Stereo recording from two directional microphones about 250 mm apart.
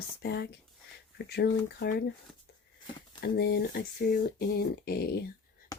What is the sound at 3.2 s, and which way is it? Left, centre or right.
Speech, left.